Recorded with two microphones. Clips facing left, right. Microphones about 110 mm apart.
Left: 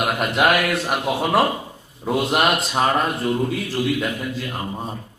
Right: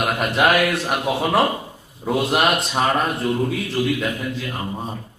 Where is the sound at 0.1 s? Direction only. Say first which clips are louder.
Right 1 dB; centre (ahead or behind).